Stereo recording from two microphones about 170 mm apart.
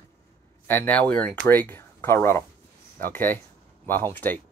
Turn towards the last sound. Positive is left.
turn(degrees=10)  # may be behind; listen again after turning